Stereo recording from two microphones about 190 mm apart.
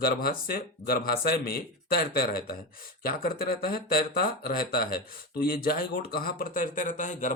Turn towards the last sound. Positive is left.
turn(degrees=40)  # may be behind; listen again after turning